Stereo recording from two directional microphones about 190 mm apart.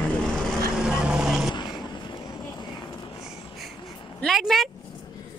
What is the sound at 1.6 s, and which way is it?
Vehicle, 25° left (ahead or behind).